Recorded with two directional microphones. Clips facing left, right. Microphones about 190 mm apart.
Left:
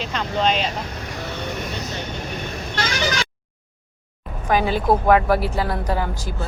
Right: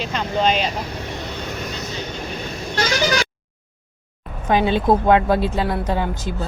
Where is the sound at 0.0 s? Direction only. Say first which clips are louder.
Right 2 dB; 5° right (ahead or behind).